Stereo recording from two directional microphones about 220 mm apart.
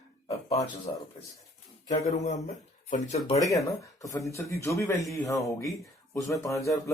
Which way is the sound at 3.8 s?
15° left (ahead or behind).